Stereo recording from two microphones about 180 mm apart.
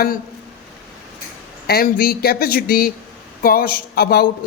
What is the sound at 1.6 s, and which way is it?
A man's voice, 55° left (ahead or behind).